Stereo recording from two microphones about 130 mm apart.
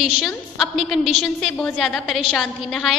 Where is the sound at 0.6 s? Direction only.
Centre (ahead or behind).